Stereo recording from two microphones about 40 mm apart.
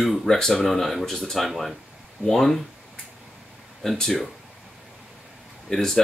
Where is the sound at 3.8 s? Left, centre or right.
Centre.